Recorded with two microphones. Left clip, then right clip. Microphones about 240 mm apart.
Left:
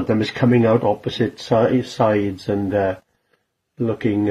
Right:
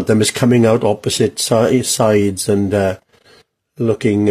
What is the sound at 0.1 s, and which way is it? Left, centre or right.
Speech, right.